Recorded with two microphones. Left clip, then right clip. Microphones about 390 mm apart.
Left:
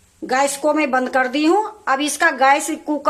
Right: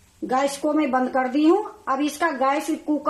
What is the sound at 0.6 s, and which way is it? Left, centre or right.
A woman's voice, left.